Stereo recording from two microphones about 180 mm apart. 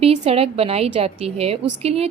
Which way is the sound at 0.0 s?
35° right (ahead or behind).